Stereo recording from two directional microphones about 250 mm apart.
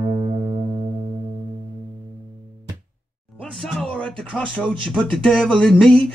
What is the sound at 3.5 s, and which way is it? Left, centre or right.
Speech, centre.